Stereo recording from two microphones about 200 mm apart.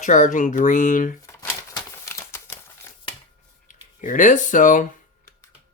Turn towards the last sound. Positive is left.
turn(degrees=40)  # may be behind; listen again after turning